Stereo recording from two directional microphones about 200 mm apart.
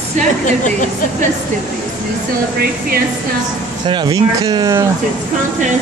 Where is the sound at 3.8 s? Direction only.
20° right (ahead or behind).